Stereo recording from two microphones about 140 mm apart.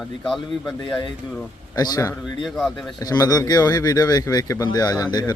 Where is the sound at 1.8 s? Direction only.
25° left (ahead or behind).